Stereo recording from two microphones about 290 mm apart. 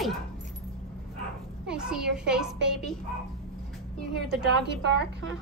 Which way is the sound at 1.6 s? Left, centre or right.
Centre.